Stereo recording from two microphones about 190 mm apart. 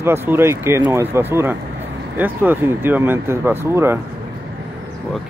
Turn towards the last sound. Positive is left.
turn(degrees=-15)  # may be behind; listen again after turning